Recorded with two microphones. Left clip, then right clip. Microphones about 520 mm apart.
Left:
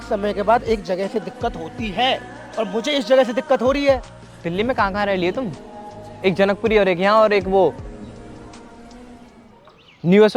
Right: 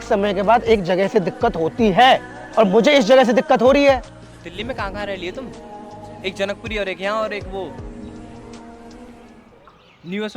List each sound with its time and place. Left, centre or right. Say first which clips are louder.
0.0 s speech: right 3 dB; right
2.6 s speech: right 8 dB; right
4.4 s a man's voice: left 7 dB; left
10.1 s a man's voice: left 14 dB; left